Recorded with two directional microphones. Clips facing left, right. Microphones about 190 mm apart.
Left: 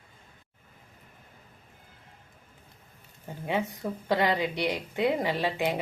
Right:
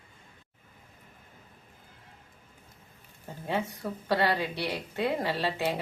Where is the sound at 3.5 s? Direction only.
15° left (ahead or behind).